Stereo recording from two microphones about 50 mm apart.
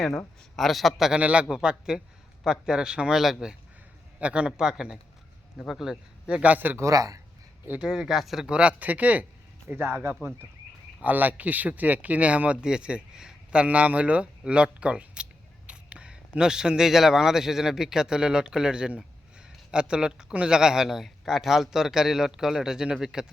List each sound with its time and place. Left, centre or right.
0.5 s a man's voice: centre
1.2 s speech: right
1.5 s a man's voice: centre
4.2 s speech: right
6.4 s speech: right
7.8 s a man's voice: centre
8.4 s speech: right
8.8 s a man's voice: right; by 23.2 s centre